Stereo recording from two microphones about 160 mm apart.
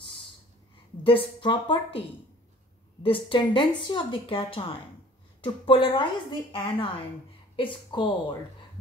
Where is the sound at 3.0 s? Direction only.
30° left (ahead or behind).